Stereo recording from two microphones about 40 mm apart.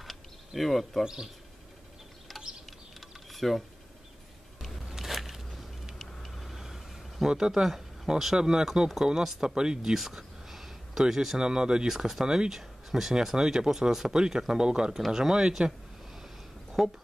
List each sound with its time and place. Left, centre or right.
0.6 s speech: centre
1.0 s speech: centre
3.3 s typing: centre
4.6 s a sound: centre
7.2 s speech: centre
9.6 s speech: centre
9.9 s a sound: centre
11.3 s speech: right
11.9 s speech: centre
15.0 s speech: centre
16.8 s speech: centre